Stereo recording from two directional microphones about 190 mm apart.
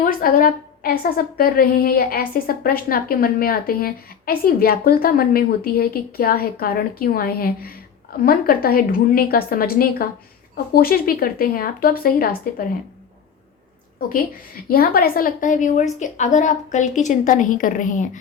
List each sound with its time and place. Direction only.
0.0 s a woman's voice: 45° left (ahead or behind)
14.1 s a woman's voice: 50° left (ahead or behind)